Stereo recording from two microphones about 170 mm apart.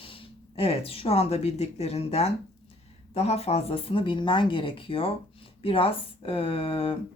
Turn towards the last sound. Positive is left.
turn(degrees=30)  # may be behind; listen again after turning